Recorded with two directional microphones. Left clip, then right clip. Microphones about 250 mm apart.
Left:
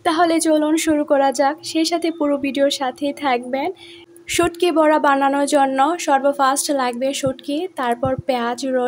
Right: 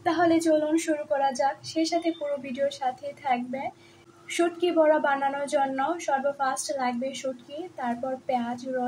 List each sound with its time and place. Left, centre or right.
0.0 s a woman's voice: left